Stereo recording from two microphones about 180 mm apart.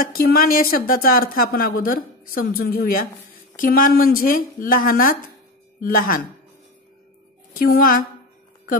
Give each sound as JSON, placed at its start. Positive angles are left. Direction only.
{"t": 0.0, "sound": "speech", "side_deg": 55}
{"t": 7.5, "sound": "speech", "side_deg": 55}